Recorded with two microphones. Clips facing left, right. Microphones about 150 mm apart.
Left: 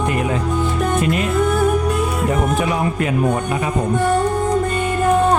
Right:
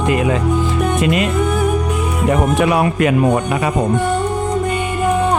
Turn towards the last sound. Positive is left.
turn(degrees=-80)